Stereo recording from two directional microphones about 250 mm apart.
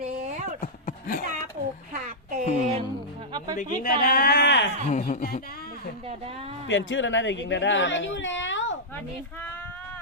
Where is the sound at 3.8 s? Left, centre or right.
Left.